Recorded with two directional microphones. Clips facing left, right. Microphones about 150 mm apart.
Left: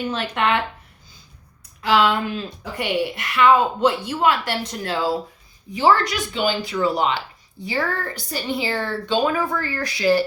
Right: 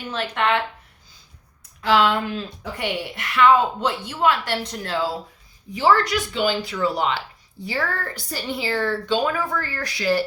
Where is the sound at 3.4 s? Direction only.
15° left (ahead or behind).